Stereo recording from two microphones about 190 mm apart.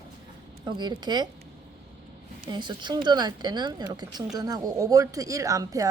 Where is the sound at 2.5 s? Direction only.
25° right (ahead or behind).